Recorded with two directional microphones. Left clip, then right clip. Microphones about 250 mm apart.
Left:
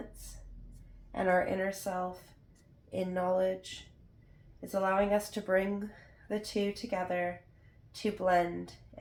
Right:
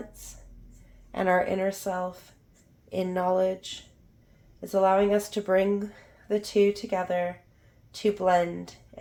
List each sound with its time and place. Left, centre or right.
1.1 s speech: right
4.7 s speech: right